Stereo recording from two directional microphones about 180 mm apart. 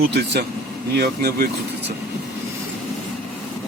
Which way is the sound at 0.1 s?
65° right (ahead or behind).